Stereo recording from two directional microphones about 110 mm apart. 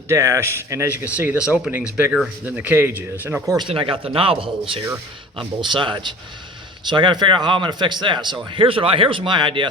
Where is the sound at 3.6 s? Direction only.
55° right (ahead or behind).